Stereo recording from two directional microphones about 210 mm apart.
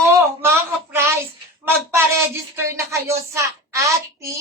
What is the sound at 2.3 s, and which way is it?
A woman's voice, 10° right (ahead or behind).